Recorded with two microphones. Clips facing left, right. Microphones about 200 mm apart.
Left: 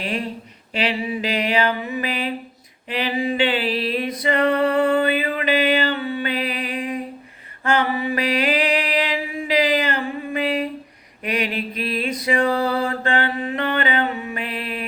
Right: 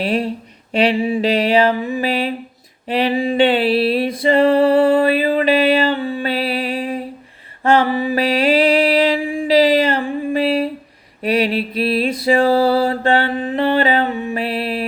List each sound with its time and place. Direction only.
0.0 s music: 40° right (ahead or behind)
0.8 s mantra: 30° right (ahead or behind)
2.9 s music: 30° right (ahead or behind)
7.6 s mantra: 30° right (ahead or behind)